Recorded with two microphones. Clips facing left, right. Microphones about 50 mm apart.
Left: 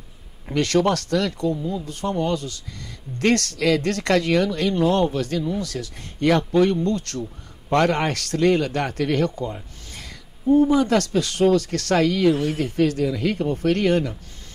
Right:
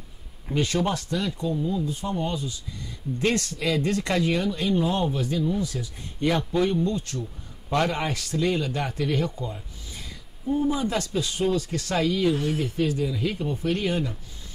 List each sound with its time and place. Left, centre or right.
0.6 s speech: left